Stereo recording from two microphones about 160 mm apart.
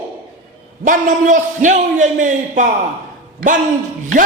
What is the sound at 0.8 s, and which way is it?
A man's voice, 55° right (ahead or behind).